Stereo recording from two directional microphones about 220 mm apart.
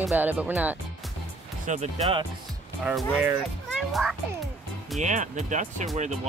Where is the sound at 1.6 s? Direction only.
30° right (ahead or behind).